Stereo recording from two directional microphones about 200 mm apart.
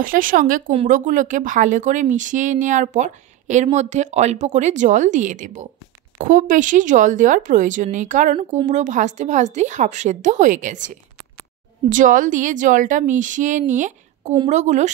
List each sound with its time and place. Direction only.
0.0 s speech: 45° right (ahead or behind)